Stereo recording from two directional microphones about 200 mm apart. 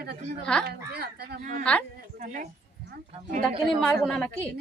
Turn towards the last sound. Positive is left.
turn(degrees=5)  # may be behind; listen again after turning